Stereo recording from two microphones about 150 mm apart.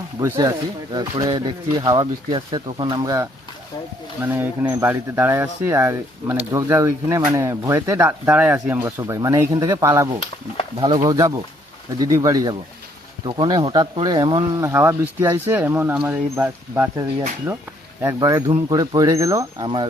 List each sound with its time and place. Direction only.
0.2 s speech: 25° right (ahead or behind)
4.2 s speech: 15° right (ahead or behind); by 19.9 s 30° right (ahead or behind)